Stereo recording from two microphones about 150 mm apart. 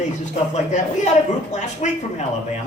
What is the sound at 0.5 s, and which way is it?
A man's voice, 50° left (ahead or behind).